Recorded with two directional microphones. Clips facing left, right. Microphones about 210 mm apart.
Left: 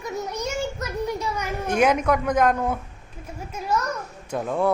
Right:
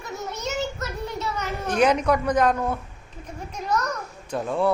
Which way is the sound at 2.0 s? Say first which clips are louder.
Even; centre (ahead or behind).